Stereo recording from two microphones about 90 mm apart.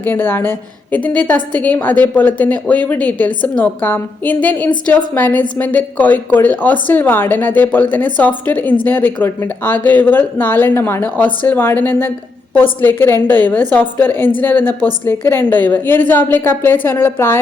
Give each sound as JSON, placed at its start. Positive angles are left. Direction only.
{"t": 0.0, "sound": "a woman's voice", "side_deg": 25}